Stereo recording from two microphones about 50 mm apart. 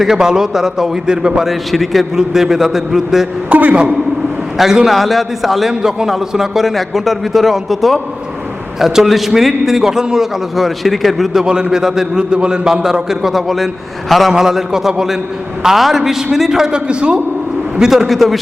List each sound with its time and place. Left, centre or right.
0.0 s a man's voice: centre
1.5 s a man's voice: centre
3.5 s a man's voice: right
4.5 s a man's voice: centre
11.4 s a man's voice: centre
14.3 s a man's voice: centre
17.7 s a man's voice: centre